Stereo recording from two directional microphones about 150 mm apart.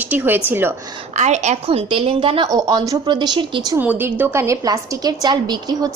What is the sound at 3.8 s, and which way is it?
A woman's voice, 10° right (ahead or behind).